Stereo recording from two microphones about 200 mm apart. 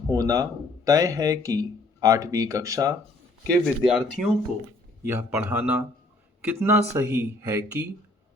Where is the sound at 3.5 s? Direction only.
Centre (ahead or behind).